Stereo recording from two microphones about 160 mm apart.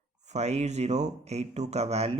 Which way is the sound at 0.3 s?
45° right (ahead or behind).